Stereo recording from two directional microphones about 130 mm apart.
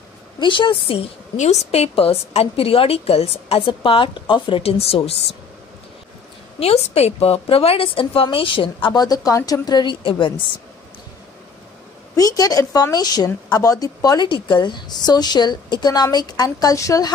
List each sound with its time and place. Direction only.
0.4 s a woman's voice: 40° left (ahead or behind)
1.3 s a woman's voice: 60° left (ahead or behind)
6.6 s a woman's voice: 50° left (ahead or behind)
8.8 s a woman's voice: 30° left (ahead or behind)
12.2 s a woman's voice: 30° left (ahead or behind)